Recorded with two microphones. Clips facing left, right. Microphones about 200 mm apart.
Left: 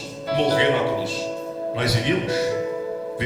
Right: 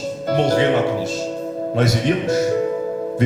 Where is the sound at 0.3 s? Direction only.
45° right (ahead or behind).